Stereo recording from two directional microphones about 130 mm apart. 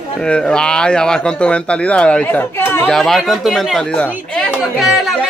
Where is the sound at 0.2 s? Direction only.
5° left (ahead or behind).